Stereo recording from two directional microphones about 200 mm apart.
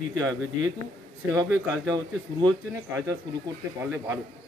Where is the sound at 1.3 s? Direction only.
20° right (ahead or behind).